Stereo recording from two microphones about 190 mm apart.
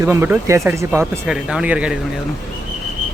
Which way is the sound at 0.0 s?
10° right (ahead or behind).